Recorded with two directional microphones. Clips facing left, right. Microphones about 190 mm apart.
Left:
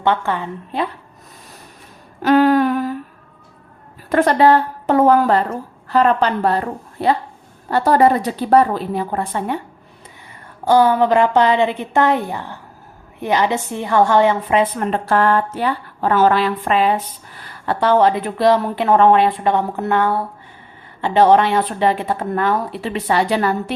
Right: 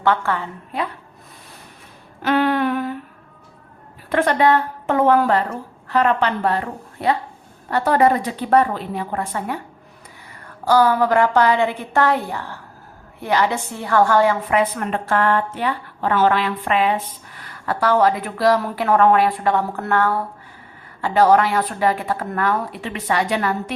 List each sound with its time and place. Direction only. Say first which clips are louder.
0.0 s a woman's voice: left 1 dB; 20° left (ahead or behind)
2.2 s a sound: left 5 dB; 40° left (ahead or behind)
4.1 s a woman's voice: left 3 dB; 40° left (ahead or behind)
10.7 s a woman's voice: left 2 dB; 20° left (ahead or behind)